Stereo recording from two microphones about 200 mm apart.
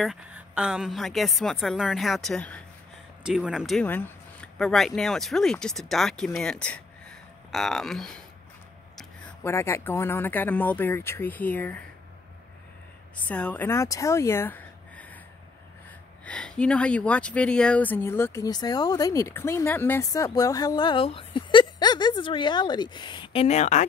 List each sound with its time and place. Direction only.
0.6 s a woman's voice: 5° right (ahead or behind)
13.1 s speech: 5° left (ahead or behind)
16.3 s speech: 5° left (ahead or behind); by 23.9 s 35° left (ahead or behind)